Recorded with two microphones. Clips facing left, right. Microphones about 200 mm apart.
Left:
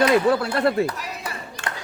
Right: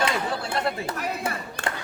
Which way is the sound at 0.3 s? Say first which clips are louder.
Left 8 dB; 60° left (ahead or behind).